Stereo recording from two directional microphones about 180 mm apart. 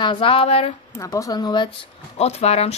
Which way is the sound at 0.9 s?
15° left (ahead or behind).